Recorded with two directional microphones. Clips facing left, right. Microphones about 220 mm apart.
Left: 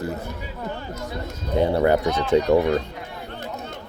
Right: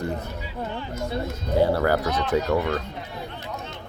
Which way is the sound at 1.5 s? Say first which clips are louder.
Left 2 dB; 20° left (ahead or behind).